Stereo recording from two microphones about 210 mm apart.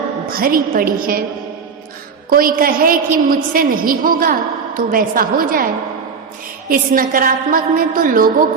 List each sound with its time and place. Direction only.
0.3 s a woman's voice: 45° right (ahead or behind)
2.3 s a woman's voice: 45° right (ahead or behind)